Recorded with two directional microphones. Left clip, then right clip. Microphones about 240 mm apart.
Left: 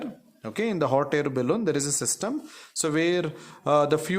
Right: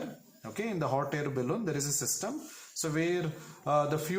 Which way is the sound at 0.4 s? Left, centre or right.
Left.